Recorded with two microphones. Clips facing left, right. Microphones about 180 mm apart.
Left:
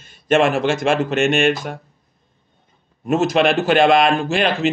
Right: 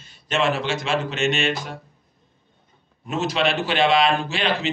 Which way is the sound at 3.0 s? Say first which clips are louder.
Left 7 dB; 50° left (ahead or behind).